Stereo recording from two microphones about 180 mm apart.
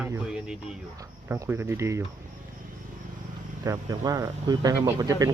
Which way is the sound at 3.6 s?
20° right (ahead or behind).